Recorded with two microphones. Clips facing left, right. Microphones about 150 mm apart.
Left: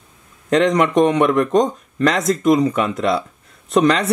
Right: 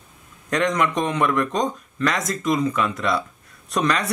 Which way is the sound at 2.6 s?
25° left (ahead or behind).